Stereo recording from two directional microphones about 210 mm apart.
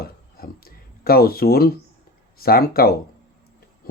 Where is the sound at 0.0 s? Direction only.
45° left (ahead or behind).